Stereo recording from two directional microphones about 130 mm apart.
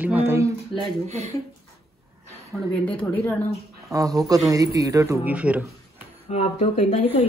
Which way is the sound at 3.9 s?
25° right (ahead or behind).